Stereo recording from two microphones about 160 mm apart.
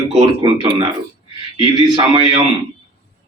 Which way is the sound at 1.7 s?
30° right (ahead or behind).